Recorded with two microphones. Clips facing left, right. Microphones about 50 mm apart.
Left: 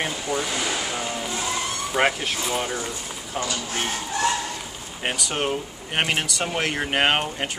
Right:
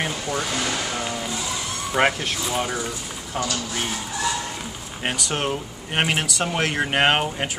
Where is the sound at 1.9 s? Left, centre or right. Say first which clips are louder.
Right 2 dB; centre.